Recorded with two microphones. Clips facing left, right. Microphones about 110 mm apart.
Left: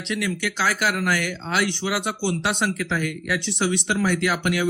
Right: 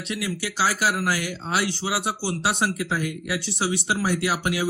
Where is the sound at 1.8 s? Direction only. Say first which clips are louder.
Left 2 dB; 30° right (ahead or behind).